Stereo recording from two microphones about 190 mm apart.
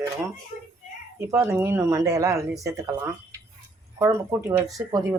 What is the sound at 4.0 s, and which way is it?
Speech, 15° right (ahead or behind).